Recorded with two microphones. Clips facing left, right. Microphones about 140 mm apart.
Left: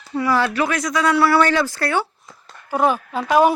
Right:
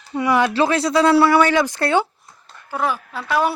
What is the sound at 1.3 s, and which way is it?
Speech, 15° right (ahead or behind).